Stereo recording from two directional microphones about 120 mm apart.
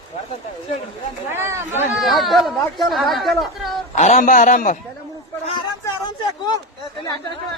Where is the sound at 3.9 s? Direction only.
80° left.